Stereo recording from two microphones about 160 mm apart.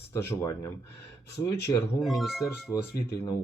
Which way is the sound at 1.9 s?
Centre (ahead or behind).